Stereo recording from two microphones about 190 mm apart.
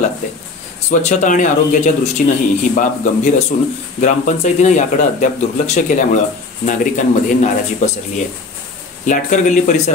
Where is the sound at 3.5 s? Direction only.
50° left (ahead or behind).